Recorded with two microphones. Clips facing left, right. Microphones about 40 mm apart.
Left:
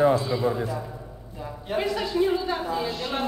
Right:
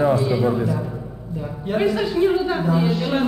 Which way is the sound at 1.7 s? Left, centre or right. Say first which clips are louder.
Right 6 dB; centre.